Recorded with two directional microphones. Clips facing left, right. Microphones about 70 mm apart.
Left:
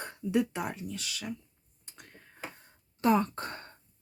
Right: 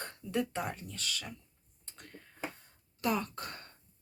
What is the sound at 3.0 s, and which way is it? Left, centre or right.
Speech, left.